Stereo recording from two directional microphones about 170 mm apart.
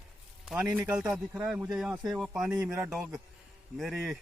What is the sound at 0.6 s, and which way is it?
Speech, 10° right (ahead or behind).